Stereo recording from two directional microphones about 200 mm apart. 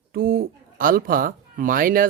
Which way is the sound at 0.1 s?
45° right (ahead or behind).